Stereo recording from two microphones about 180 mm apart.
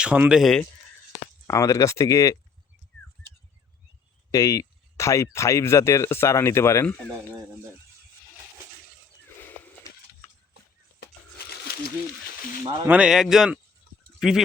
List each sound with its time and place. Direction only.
0.0 s speech: 5° right (ahead or behind)
1.1 s speech: 20° left (ahead or behind)
4.3 s speech: 20° left (ahead or behind)
9.4 s a sound: 15° left (ahead or behind)
12.6 s speech: 25° right (ahead or behind)
12.9 s speech: 5° right (ahead or behind)